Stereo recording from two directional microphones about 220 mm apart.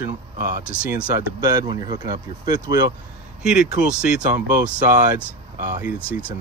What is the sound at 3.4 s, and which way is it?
Speech, 5° right (ahead or behind).